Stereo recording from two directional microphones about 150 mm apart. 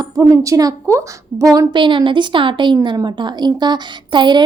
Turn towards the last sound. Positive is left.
turn(degrees=-30)  # may be behind; listen again after turning